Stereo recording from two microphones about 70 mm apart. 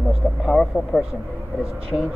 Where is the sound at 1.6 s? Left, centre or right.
Right.